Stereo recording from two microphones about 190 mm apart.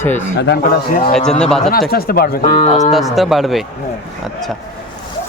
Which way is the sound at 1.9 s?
50° left (ahead or behind).